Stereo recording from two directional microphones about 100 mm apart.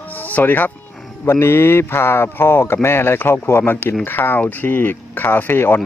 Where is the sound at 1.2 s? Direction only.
25° left (ahead or behind).